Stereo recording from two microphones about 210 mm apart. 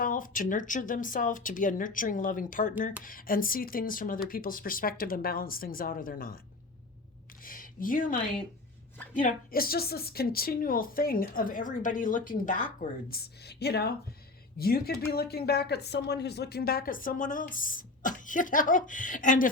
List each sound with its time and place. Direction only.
0.0 s a woman's voice: 40° left (ahead or behind)
7.4 s a sound: 40° left (ahead or behind)
9.1 s a woman's voice: 40° left (ahead or behind)